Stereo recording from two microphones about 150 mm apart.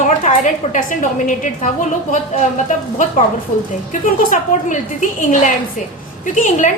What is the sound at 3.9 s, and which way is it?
Speech, 60° left (ahead or behind).